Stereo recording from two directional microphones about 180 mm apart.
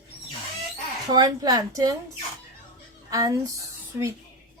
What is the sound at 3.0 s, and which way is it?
Speech, 20° right (ahead or behind).